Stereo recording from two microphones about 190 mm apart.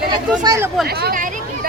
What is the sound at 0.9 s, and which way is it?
Speech, 55° right (ahead or behind).